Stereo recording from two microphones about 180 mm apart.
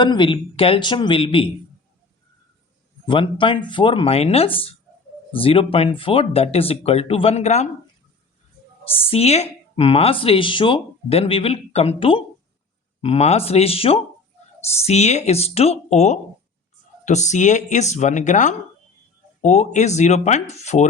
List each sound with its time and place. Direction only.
0.0 s speech: 25° left (ahead or behind)
3.1 s speech: 30° left (ahead or behind)
9.0 s speech: 35° left (ahead or behind)